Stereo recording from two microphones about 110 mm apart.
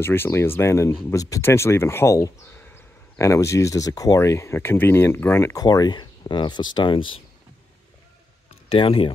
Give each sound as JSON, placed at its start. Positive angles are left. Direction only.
{"t": 0.0, "sound": "speech", "side_deg": 20}
{"t": 5.6, "sound": "speech", "side_deg": 35}
{"t": 8.6, "sound": "speech", "side_deg": 55}